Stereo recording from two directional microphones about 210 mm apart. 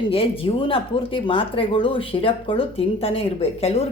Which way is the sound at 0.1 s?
25° left (ahead or behind).